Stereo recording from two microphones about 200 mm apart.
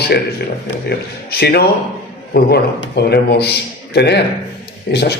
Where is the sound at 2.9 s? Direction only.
55° left (ahead or behind).